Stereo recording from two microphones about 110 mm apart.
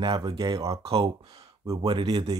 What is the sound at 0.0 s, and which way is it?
Speech, 45° right (ahead or behind).